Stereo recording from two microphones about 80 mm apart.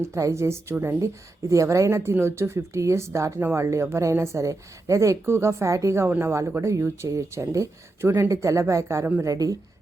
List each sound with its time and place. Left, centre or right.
0.1 s a woman's voice: right